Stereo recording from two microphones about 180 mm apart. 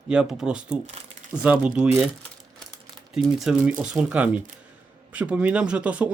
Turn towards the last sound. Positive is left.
turn(degrees=-10)  # may be behind; listen again after turning